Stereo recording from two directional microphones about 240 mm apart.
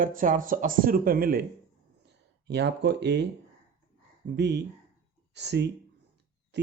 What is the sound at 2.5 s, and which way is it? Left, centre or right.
Speech, right.